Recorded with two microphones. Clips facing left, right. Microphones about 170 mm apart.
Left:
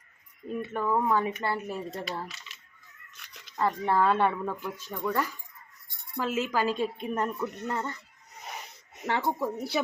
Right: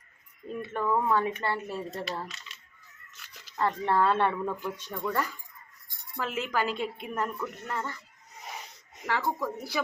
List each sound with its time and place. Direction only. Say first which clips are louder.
0.6 s speech: even; 5° left (ahead or behind)
3.2 s a sound: even; centre (ahead or behind)
3.7 s speech: left 1 dB; 10° left (ahead or behind)
6.7 s a woman's voice: left 3 dB; 15° right (ahead or behind)
7.1 s speech: left 3 dB; 20° left (ahead or behind)
9.0 s speech: left 2 dB; 25° left (ahead or behind)